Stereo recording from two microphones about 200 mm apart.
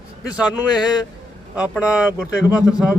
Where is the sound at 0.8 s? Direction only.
20° left (ahead or behind).